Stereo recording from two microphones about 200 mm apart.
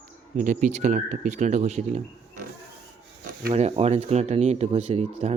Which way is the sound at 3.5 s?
30° right (ahead or behind).